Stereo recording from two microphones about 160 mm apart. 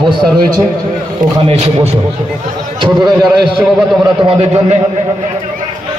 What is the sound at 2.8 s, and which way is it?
Speech, 30° right (ahead or behind).